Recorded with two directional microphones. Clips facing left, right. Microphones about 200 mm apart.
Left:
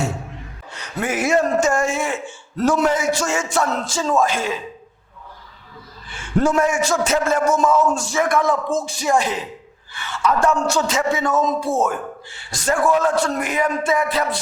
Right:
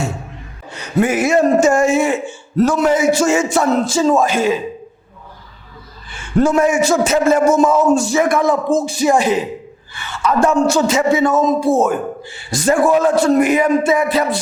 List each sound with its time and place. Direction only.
0.7 s a man's voice: 5° right (ahead or behind)
6.1 s a man's voice: 5° right (ahead or behind)